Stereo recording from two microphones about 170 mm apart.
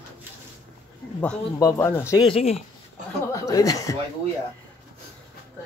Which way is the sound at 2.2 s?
35° left (ahead or behind).